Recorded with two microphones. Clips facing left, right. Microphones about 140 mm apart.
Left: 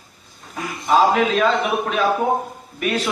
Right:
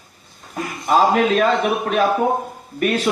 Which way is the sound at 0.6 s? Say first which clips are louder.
Even; 45° right (ahead or behind).